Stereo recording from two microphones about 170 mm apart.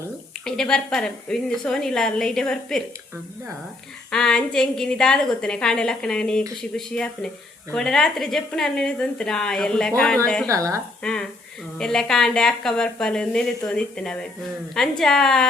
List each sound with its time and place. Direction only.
0.4 s a woman's voice: 5° left (ahead or behind)
4.1 s a woman's voice: 5° left (ahead or behind)
10.5 s speech: 20° right (ahead or behind)
11.0 s a woman's voice: 5° left (ahead or behind)